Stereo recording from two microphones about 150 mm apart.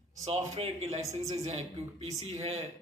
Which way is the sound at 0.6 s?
45° right (ahead or behind).